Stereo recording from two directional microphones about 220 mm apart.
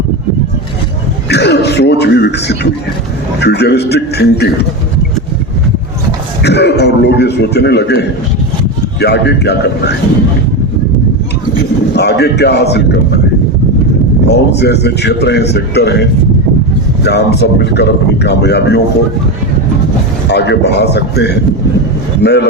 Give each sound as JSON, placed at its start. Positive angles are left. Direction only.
{"t": 1.3, "sound": "a man's voice", "side_deg": 50}
{"t": 6.4, "sound": "a man's voice", "side_deg": 50}
{"t": 11.9, "sound": "a man's voice", "side_deg": 50}
{"t": 14.3, "sound": "a man's voice", "side_deg": 50}
{"t": 20.2, "sound": "a man's voice", "side_deg": 50}